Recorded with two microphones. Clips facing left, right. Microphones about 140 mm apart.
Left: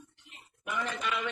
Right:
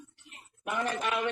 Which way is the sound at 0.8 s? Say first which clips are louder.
Right 4 dB; 55° right (ahead or behind).